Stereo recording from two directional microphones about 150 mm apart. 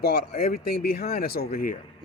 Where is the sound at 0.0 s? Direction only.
90° left; by 1.8 s 75° left (ahead or behind).